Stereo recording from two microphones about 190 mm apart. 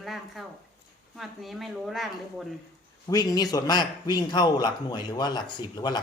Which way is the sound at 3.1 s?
20° left (ahead or behind).